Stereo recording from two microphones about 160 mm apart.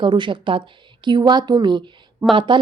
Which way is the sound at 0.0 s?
30° right (ahead or behind).